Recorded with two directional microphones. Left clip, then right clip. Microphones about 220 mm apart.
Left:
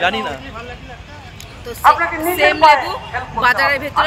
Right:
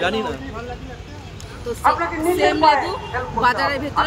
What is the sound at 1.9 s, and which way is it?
A man's voice, 20° right (ahead or behind).